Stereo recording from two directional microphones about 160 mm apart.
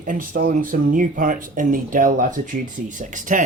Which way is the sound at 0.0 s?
60° right (ahead or behind).